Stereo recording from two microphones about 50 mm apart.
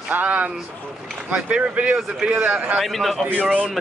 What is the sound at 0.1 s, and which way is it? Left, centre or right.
Speech, right.